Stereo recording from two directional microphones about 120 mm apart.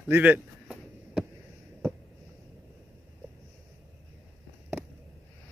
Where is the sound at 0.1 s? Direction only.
15° right (ahead or behind).